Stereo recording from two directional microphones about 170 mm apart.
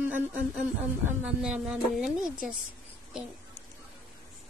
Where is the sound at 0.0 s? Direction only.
10° right (ahead or behind).